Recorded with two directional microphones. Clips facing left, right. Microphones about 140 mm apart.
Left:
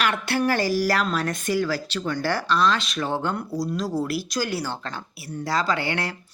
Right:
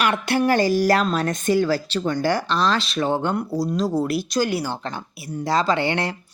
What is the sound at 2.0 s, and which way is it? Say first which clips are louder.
Speech: right 3 dB; 15° right (ahead or behind).